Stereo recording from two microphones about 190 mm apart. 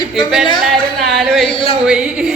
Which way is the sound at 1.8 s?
5° right (ahead or behind).